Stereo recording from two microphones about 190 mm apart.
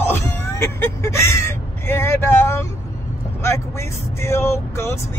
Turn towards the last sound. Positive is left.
turn(degrees=15)  # may be behind; listen again after turning